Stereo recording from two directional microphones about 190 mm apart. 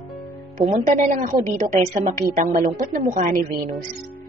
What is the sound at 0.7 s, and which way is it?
A woman's voice, 40° right (ahead or behind).